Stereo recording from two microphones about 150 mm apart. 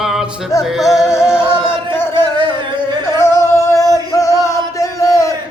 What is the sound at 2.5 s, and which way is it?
Music, 30° right (ahead or behind).